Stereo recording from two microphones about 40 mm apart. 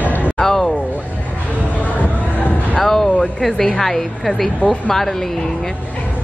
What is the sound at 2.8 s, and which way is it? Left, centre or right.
A woman's voice, centre.